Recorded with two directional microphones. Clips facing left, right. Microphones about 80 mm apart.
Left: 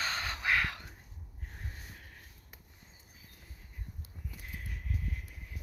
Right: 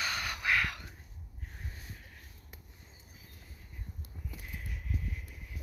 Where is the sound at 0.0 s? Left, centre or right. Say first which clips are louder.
Even; left.